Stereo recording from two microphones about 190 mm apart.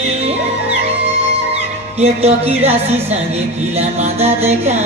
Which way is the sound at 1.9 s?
35° right (ahead or behind).